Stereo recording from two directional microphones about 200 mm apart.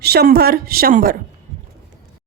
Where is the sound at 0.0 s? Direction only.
55° right (ahead or behind).